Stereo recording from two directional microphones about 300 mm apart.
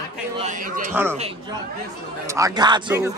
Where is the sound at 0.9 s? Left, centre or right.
Centre.